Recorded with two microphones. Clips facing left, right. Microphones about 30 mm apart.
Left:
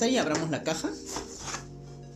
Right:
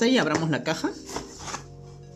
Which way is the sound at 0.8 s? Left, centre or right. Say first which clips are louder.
Right 3 dB; centre.